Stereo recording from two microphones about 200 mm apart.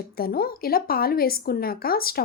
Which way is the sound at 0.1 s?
50° left (ahead or behind).